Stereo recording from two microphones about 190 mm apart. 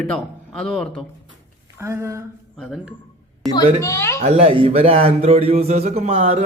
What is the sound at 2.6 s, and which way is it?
Speech, centre (ahead or behind).